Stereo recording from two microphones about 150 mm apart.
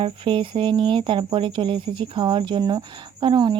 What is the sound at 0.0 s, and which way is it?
Speech, 35° right (ahead or behind).